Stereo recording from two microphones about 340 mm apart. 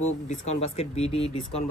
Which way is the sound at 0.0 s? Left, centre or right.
Centre.